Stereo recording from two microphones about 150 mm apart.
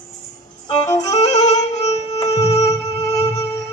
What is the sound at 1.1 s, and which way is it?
Music, 50° left (ahead or behind).